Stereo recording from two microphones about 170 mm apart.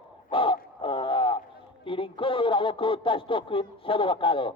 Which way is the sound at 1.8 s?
30° left (ahead or behind).